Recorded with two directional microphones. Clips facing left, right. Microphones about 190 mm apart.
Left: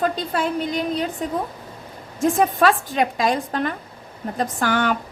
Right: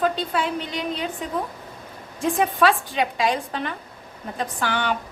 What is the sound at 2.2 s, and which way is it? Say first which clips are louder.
A woman's voice: left 2 dB; 45° left (ahead or behind).